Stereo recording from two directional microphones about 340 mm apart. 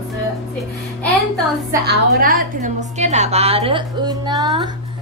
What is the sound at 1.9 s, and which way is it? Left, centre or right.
A woman's voice, right.